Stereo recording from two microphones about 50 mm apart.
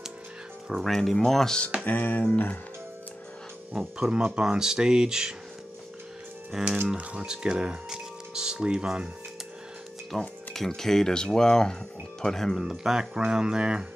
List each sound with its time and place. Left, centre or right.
0.7 s speech: centre
0.9 s speech: centre
1.9 s speech: left
3.8 s speech: centre
4.1 s speech: centre
6.5 s speech: centre
7.0 s speech: right
10.1 s speech: centre
12.5 s speech: centre